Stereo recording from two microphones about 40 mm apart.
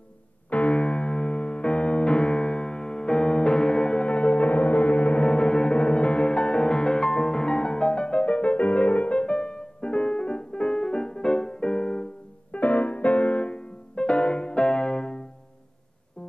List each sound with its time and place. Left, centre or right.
0.5 s music: left
5.2 s music: left
12.4 s music: left